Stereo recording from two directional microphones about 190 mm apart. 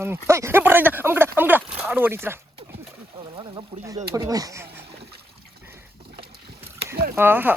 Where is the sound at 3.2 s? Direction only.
25° right (ahead or behind).